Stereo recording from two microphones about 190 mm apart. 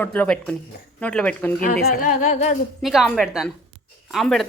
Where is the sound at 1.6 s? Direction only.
45° left (ahead or behind).